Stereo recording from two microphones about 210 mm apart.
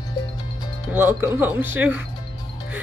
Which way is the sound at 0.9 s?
10° right (ahead or behind).